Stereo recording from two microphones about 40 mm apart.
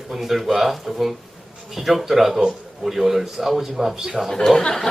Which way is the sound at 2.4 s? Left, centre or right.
Centre.